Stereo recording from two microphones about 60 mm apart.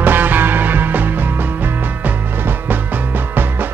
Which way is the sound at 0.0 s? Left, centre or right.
Right.